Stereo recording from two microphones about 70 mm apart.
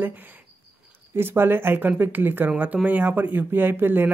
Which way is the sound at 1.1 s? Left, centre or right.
Right.